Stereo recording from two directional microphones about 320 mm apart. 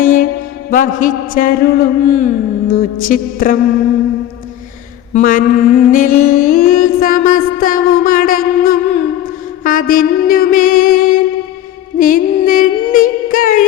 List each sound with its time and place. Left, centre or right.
0.0 s mantra: left
0.7 s a man's voice: left
5.1 s mantra: left
9.6 s music: left
11.9 s a sound: left